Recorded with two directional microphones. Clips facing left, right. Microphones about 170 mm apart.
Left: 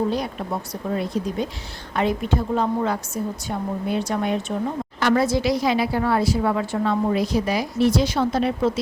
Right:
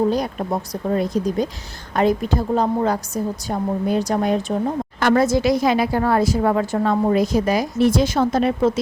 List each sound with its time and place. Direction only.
0.1 s a woman's voice: 40° right (ahead or behind)